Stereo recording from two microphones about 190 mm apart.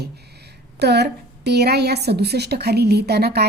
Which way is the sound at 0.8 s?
60° right (ahead or behind).